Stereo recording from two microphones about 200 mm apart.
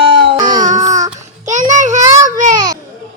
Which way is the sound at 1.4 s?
35° right (ahead or behind).